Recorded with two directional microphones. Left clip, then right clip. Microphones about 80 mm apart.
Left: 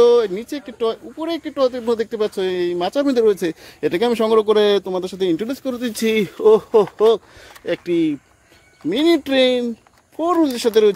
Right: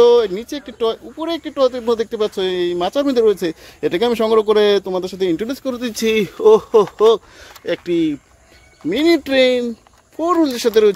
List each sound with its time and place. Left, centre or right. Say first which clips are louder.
0.0 s speech: right 2 dB; left